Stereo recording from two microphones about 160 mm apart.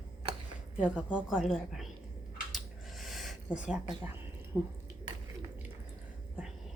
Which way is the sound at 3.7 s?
5° right (ahead or behind).